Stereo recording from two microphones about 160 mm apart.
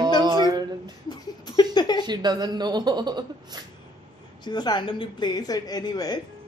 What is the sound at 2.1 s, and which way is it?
A woman's voice, 25° right (ahead or behind).